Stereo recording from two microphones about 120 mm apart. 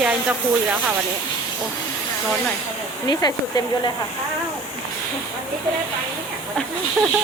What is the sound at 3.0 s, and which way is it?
Speech, 35° left (ahead or behind).